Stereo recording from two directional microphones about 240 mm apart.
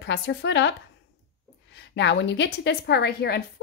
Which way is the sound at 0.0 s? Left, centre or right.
Left.